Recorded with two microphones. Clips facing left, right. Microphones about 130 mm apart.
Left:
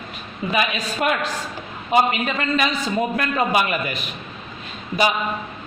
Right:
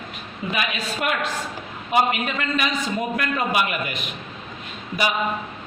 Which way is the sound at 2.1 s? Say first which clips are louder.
Left 3 dB; 30° left (ahead or behind).